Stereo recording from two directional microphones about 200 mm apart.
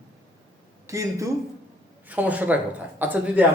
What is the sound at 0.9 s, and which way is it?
A man's voice, 15° right (ahead or behind).